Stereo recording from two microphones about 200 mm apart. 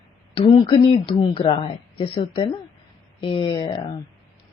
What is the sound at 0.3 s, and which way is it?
Speech, 25° left (ahead or behind).